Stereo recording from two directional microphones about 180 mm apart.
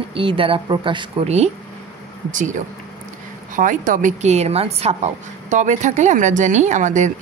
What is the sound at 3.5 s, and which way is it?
A woman's voice, 50° right (ahead or behind).